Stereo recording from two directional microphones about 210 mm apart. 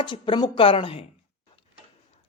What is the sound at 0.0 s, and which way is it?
A man's voice, 20° left (ahead or behind).